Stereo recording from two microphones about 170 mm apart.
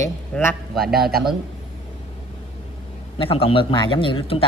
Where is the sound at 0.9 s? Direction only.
65° right (ahead or behind).